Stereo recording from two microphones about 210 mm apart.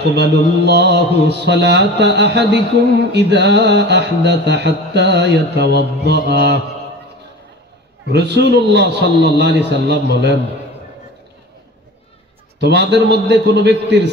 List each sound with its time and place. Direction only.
0.1 s mantra: 55° right (ahead or behind)
3.1 s speech: 55° right (ahead or behind)
8.1 s mantra: 55° right (ahead or behind)
12.5 s speech: 55° right (ahead or behind)